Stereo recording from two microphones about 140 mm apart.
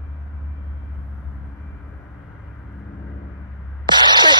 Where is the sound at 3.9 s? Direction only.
30° right (ahead or behind).